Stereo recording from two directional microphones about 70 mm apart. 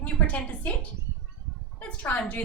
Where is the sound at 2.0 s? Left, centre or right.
Left.